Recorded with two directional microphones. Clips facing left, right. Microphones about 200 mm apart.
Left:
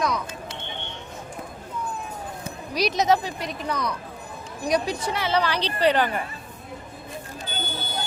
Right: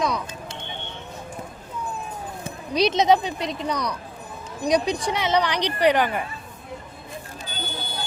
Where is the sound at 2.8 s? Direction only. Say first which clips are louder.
Right 3 dB; 20° right (ahead or behind).